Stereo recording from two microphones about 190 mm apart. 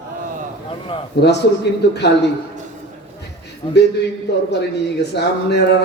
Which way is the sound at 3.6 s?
25° left (ahead or behind).